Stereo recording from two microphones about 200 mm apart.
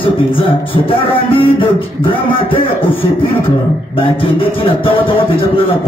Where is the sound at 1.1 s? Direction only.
25° left (ahead or behind).